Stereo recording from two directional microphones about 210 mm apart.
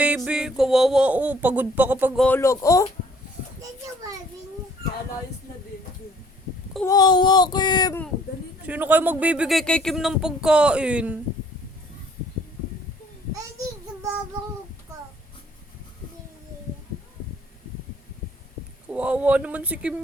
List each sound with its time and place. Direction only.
0.0 s speech: 5° right (ahead or behind)
2.2 s speech: 10° left (ahead or behind)
6.8 s speech: 20° left (ahead or behind)
8.6 s speech: 10° right (ahead or behind)
18.9 s speech: 5° right (ahead or behind)